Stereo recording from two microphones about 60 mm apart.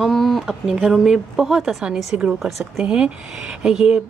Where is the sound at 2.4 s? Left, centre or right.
Centre.